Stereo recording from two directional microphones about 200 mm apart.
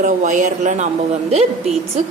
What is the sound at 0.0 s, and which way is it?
Speech, 40° right (ahead or behind).